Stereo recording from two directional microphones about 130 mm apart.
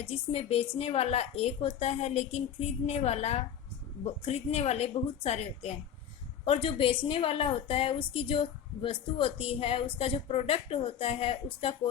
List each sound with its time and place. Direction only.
0.0 s a woman's voice: 50° left (ahead or behind)